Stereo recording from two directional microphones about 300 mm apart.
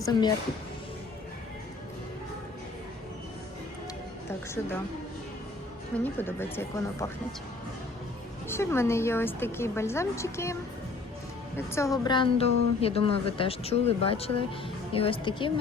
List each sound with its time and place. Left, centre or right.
0.0 s a woman's voice: centre
4.3 s a woman's voice: centre
6.1 s a woman's voice: centre
8.4 s a woman's voice: centre